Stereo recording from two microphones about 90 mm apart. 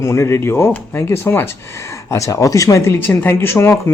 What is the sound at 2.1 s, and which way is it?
Speech, 40° left (ahead or behind).